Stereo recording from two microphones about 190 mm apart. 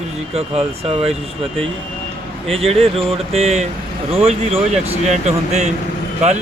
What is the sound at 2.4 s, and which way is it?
Speech, 30° right (ahead or behind).